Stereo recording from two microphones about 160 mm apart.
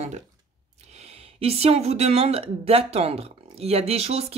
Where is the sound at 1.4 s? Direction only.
40° right (ahead or behind).